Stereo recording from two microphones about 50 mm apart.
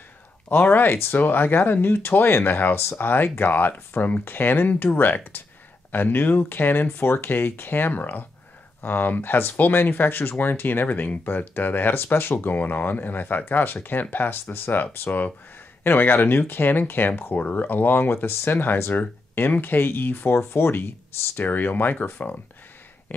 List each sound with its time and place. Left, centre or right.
0.5 s speech: left
0.8 s speech: left
20.3 s speech: left
21.4 s speech: left